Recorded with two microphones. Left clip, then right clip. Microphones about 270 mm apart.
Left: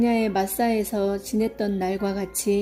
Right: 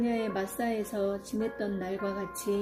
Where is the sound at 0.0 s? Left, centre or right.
Left.